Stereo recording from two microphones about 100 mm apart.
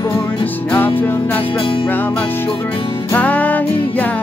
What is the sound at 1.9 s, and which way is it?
Music, 20° left (ahead or behind).